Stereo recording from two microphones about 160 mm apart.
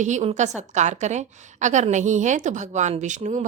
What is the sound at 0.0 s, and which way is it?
A woman's voice, 45° right (ahead or behind).